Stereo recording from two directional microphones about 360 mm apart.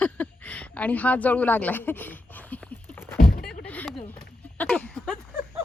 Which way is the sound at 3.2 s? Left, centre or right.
Left.